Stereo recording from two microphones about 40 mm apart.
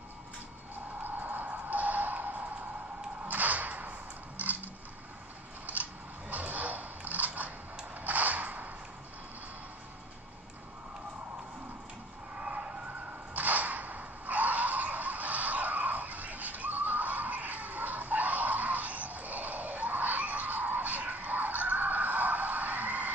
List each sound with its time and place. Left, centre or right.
1.0 s music: right
3.3 s whip: right
4.4 s a sound: right
5.7 s a sound: right
8.0 s whip: right
12.4 s emergency vehicle: right
13.3 s whip: right